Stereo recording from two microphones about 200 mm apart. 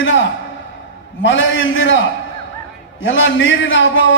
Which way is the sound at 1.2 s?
70° left (ahead or behind).